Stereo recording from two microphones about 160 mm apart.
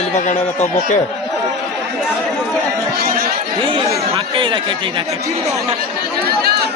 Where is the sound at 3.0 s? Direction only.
65° right (ahead or behind).